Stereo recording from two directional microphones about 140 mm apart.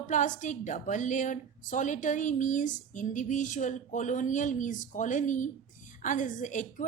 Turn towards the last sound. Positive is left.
turn(degrees=65)  # may be behind; listen again after turning